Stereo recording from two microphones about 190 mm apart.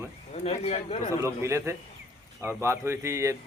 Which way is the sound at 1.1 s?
15° right (ahead or behind).